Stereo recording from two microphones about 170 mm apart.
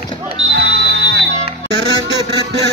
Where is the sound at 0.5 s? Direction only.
85° right.